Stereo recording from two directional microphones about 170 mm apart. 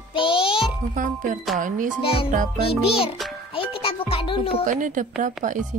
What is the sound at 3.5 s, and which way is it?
Music, 30° left (ahead or behind).